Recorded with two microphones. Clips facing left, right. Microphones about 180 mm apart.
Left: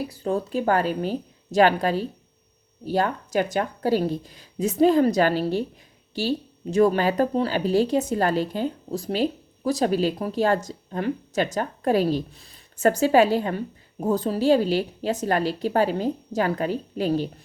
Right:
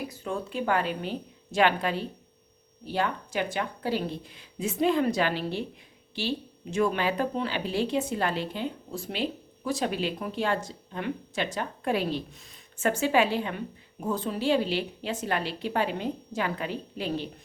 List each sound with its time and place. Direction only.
0.1 s speech: 35° left (ahead or behind)